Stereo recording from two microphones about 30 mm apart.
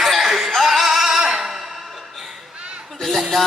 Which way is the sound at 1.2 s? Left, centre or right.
Centre.